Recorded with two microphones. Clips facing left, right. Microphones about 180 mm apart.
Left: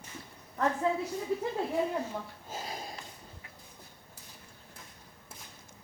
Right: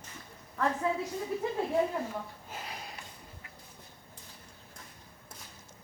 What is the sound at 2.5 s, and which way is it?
Sniff, 40° left (ahead or behind).